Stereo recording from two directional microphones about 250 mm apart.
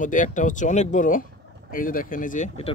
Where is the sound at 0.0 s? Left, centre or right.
Left.